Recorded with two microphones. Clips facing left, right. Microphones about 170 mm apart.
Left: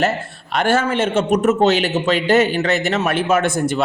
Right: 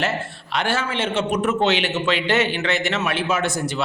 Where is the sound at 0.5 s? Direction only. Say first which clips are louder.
Left 6 dB; 50° left (ahead or behind).